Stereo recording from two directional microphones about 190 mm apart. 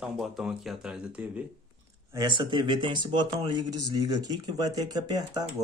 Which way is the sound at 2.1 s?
25° right (ahead or behind).